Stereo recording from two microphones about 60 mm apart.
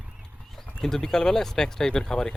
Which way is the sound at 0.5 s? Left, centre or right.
Centre.